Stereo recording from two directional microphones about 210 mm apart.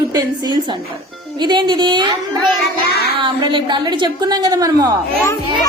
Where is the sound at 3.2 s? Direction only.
25° right (ahead or behind).